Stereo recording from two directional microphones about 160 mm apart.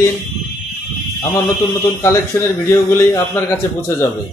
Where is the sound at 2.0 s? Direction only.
15° left (ahead or behind).